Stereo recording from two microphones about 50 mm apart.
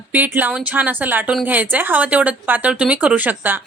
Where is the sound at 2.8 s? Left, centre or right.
Right.